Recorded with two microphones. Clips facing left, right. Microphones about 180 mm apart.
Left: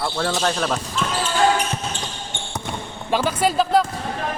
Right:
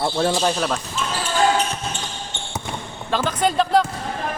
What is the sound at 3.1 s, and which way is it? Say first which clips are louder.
Speech: left 1 dB; 10° left (ahead or behind).